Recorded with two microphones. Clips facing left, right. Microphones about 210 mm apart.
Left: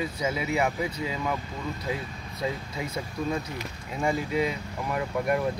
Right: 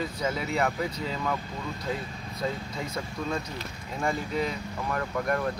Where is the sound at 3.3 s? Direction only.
10° left (ahead or behind).